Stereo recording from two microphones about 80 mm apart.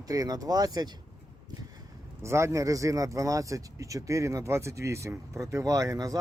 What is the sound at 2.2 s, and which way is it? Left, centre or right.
Speech, right.